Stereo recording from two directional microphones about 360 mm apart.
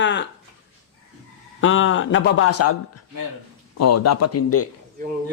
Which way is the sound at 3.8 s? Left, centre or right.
Left.